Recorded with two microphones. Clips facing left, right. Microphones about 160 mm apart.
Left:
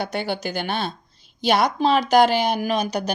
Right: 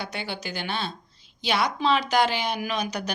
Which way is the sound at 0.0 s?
45° left (ahead or behind).